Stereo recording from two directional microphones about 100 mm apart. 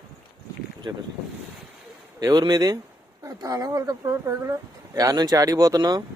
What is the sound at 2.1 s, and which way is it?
Speech, 45° right (ahead or behind).